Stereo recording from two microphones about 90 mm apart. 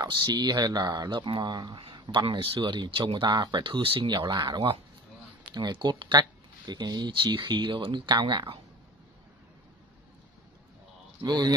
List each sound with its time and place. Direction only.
0.1 s speech: 55° right (ahead or behind); by 4.1 s 80° right
4.1 s speech: 55° right (ahead or behind)
7.3 s speech: 60° right (ahead or behind)
11.2 s speech: 50° right (ahead or behind)